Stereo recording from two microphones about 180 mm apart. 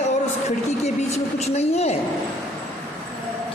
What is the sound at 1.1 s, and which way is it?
Speech, 35° left (ahead or behind).